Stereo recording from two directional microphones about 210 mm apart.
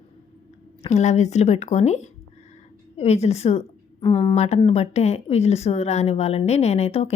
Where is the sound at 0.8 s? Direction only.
30° left (ahead or behind).